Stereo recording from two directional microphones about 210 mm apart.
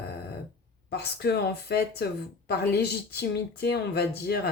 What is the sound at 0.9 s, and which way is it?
Speech, 50° left (ahead or behind).